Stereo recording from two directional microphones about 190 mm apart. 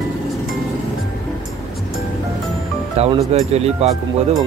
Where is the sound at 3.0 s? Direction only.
35° right (ahead or behind).